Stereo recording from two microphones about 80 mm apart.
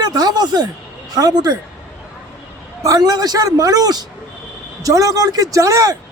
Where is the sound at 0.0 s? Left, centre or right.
Right.